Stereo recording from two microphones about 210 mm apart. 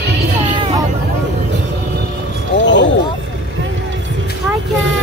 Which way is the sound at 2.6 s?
60° left (ahead or behind).